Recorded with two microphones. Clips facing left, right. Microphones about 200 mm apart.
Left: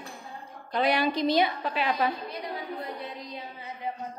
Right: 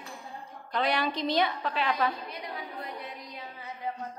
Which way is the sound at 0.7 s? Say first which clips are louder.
Left 4 dB; 10° left (ahead or behind).